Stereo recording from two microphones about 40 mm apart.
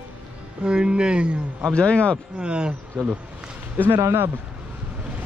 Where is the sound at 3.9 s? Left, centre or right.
Right.